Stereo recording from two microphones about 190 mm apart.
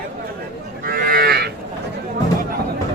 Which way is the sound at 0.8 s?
50° right (ahead or behind).